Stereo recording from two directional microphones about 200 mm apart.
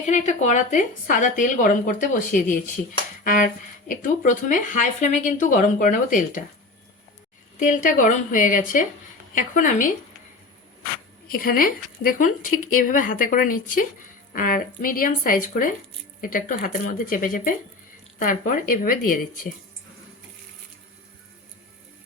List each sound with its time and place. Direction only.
0.1 s speech: 35° left (ahead or behind)
3.2 s speech: 40° left (ahead or behind)
7.6 s speech: 40° left (ahead or behind)
11.3 s a woman's voice: 45° left (ahead or behind)